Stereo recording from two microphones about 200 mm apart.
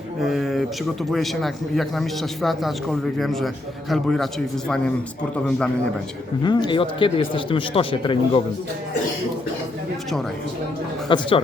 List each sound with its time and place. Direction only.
0.2 s a sound: centre (ahead or behind)
1.1 s a man's voice: centre (ahead or behind)
5.5 s a man's voice: 5° left (ahead or behind)
6.4 s speech: 20° left (ahead or behind)
11.1 s speech: 25° left (ahead or behind)